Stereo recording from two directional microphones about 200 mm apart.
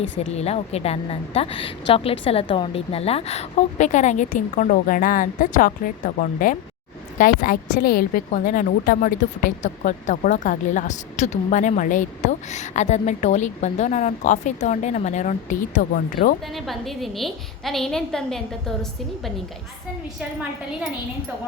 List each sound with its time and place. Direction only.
0.3 s a woman's voice: 30° left (ahead or behind)
16.6 s a woman's voice: centre (ahead or behind)